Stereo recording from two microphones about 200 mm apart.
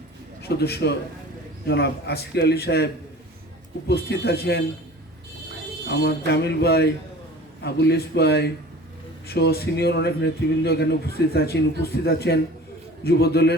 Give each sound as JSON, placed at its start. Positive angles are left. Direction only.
{"t": 0.4, "sound": "a man's voice", "side_deg": 55}
{"t": 5.9, "sound": "a man's voice", "side_deg": 55}